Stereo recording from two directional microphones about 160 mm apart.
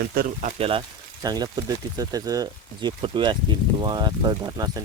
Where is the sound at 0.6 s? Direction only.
30° right (ahead or behind).